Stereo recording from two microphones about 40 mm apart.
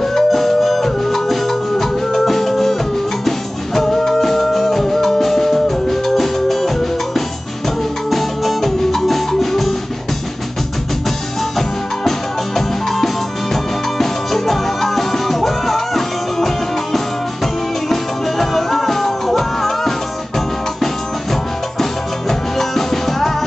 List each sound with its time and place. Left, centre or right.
0.0 s music: centre
11.1 s music: centre